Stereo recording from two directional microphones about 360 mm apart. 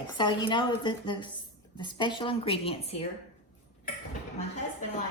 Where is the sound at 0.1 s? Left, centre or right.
Centre.